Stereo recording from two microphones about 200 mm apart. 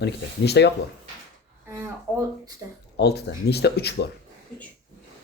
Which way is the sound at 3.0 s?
55° left (ahead or behind).